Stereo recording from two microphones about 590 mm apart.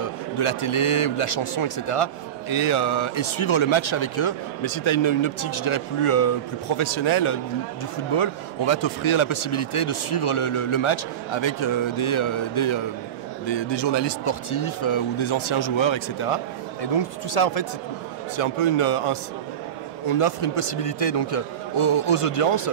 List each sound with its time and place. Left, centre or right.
0.0 s a man's voice: left
16.8 s speech: left
18.3 s a man's voice: left